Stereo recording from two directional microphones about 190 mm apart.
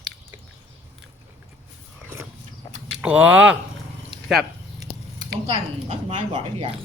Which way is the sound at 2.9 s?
5° right (ahead or behind).